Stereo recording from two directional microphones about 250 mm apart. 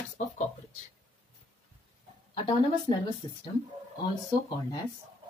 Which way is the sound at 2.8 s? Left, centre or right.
Centre.